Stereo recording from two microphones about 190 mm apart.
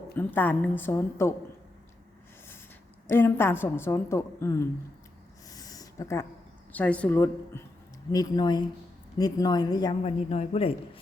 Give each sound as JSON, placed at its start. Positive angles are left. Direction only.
{"t": 0.1, "sound": "a woman's voice", "side_deg": 10}
{"t": 3.1, "sound": "a woman's voice", "side_deg": 10}
{"t": 5.5, "sound": "a sound", "side_deg": 20}
{"t": 6.7, "sound": "a woman's voice", "side_deg": 5}